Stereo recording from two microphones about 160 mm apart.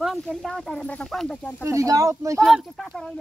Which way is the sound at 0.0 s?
Centre (ahead or behind).